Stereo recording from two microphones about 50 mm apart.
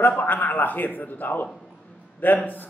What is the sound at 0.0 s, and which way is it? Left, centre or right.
A man's voice, left.